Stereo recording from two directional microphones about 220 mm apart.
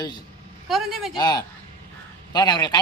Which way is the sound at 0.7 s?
Centre (ahead or behind).